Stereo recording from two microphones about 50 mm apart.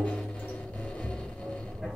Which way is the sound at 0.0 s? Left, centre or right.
Centre.